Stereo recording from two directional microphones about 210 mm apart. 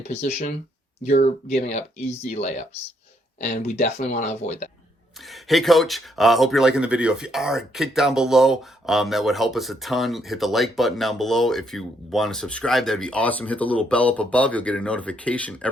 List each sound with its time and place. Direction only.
0.1 s speech: 30° left (ahead or behind)
5.3 s speech: centre (ahead or behind)